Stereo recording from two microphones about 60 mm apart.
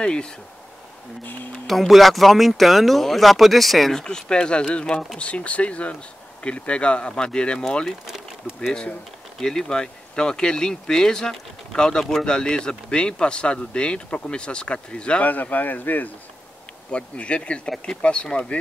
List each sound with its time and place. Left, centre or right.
0.0 s speech: centre
1.7 s speech: centre
4.0 s speech: centre
9.4 s speech: centre
15.2 s speech: left
16.9 s speech: centre